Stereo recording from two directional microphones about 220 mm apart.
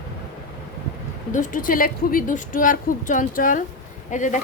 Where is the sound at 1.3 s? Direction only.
35° left (ahead or behind).